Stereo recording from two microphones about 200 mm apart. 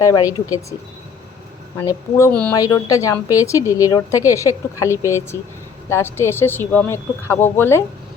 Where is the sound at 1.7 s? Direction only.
15° left (ahead or behind).